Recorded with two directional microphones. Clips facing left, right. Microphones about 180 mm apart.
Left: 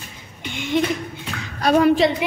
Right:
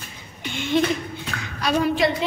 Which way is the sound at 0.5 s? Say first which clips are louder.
Even; 15° left (ahead or behind).